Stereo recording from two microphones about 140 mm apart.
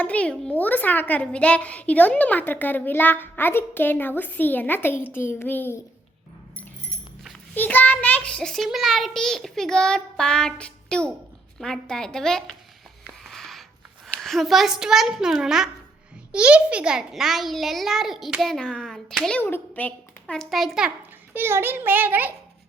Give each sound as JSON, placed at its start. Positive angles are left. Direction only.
{"t": 0.0, "sound": "a child's voice", "side_deg": 10}
{"t": 7.5, "sound": "a child's voice", "side_deg": 10}
{"t": 13.2, "sound": "a sound", "side_deg": 0}
{"t": 14.2, "sound": "a child's voice", "side_deg": 0}
{"t": 19.4, "sound": "a child's voice", "side_deg": 15}
{"t": 21.3, "sound": "a child's voice", "side_deg": -15}